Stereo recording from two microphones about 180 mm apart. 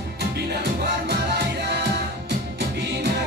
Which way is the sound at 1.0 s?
65° right (ahead or behind).